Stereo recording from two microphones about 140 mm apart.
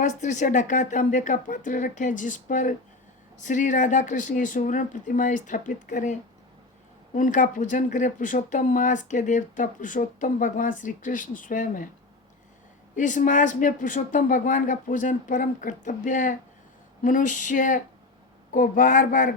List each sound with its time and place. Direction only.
0.0 s speech: 60° left (ahead or behind)
7.2 s speech: 65° left (ahead or behind)
13.0 s speech: 65° left (ahead or behind)